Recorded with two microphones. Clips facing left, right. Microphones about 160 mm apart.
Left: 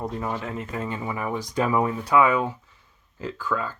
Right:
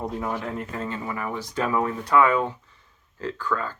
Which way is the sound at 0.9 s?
15° left (ahead or behind).